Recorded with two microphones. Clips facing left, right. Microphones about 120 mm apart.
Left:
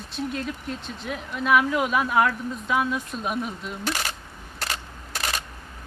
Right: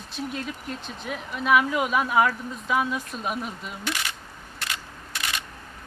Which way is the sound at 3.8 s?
40° left (ahead or behind).